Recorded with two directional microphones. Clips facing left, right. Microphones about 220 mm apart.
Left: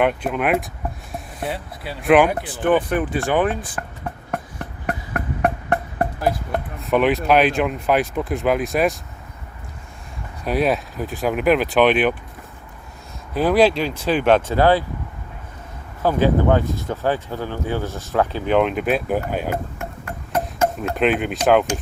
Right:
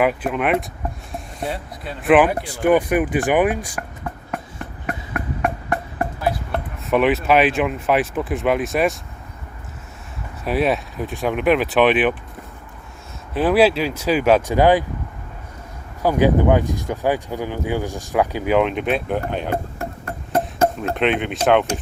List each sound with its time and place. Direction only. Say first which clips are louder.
0.0 s speech: even; 5° right (ahead or behind)
4.9 s music: left 1 dB; 45° left (ahead or behind)
6.7 s basketball bounce: right 1 dB; centre (ahead or behind)
7.3 s speech: even; centre (ahead or behind)
10.4 s speech: even; centre (ahead or behind)
13.3 s speech: even; 5° right (ahead or behind)
16.0 s speech: right 1 dB; 15° right (ahead or behind); by 19.5 s 5° left (ahead or behind)
19.8 s a sound: right 2 dB; 35° right (ahead or behind)
20.9 s speech: left 1 dB; centre (ahead or behind)